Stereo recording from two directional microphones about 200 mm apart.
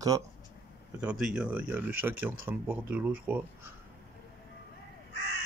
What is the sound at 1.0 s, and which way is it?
Speech, 5° right (ahead or behind).